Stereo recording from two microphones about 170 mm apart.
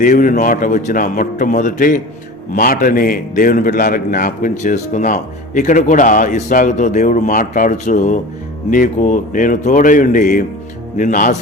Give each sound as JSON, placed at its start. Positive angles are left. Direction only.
{"t": 0.0, "sound": "a man's voice", "side_deg": 50}